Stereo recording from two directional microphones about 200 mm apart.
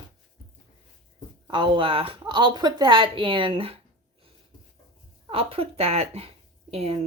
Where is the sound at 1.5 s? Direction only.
25° right (ahead or behind).